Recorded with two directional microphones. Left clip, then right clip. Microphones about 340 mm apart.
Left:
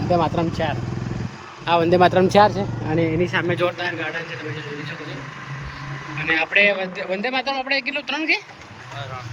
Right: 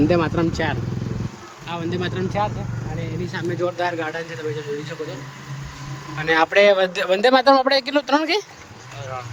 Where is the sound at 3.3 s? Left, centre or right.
Centre.